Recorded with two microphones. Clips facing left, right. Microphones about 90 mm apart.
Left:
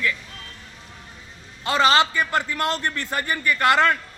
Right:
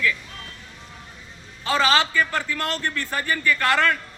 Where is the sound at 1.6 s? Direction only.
20° left (ahead or behind).